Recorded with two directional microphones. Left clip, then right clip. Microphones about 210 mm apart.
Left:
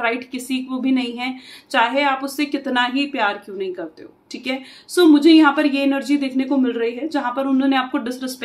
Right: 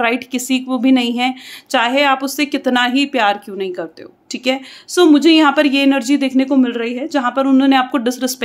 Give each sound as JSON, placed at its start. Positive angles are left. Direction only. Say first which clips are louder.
{"t": 0.0, "sound": "a woman's voice", "louder": "right 5 dB", "side_deg": -55}